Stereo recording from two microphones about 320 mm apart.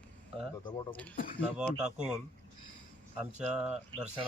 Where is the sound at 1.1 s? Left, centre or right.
Left.